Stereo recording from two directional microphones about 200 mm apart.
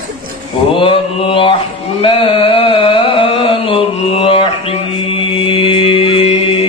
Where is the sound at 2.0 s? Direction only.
25° left (ahead or behind).